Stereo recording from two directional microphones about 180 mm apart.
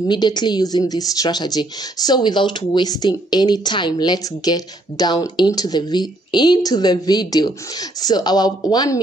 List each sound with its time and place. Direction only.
0.1 s a woman's voice: 25° left (ahead or behind)